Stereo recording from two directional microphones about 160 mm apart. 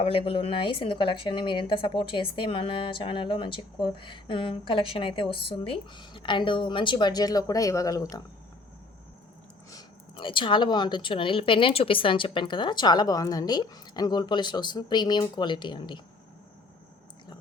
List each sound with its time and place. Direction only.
0.0 s a woman's voice: 35° left (ahead or behind)
9.7 s speech: 30° left (ahead or behind)